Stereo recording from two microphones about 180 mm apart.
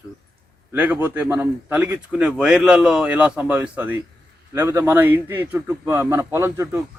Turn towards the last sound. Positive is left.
turn(degrees=-15)  # may be behind; listen again after turning